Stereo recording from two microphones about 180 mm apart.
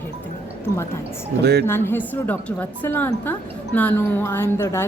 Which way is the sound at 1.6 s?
10° left (ahead or behind).